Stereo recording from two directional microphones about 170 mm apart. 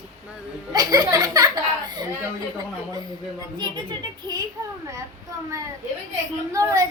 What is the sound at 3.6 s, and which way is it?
Speech, 25° right (ahead or behind).